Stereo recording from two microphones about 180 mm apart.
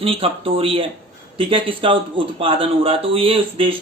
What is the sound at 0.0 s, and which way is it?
Speech, 30° right (ahead or behind).